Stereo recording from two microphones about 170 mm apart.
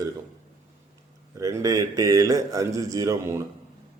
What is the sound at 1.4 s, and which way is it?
Speech, 20° right (ahead or behind).